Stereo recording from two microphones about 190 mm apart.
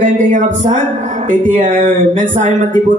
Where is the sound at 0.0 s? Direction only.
45° right (ahead or behind).